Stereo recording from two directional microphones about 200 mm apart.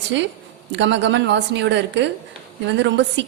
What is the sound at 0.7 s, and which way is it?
A woman's voice, 60° right (ahead or behind).